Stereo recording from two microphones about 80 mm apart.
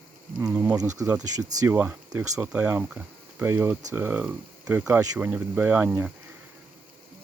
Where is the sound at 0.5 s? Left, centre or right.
Right.